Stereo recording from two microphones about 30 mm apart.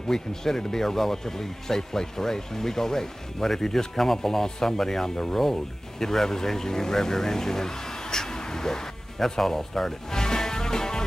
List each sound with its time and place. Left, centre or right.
0.1 s speech: centre
10.1 s music: left